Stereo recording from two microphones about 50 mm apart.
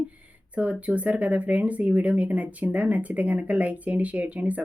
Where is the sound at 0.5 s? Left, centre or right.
Right.